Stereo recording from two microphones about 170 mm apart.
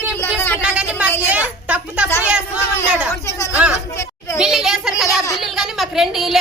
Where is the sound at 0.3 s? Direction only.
15° left (ahead or behind).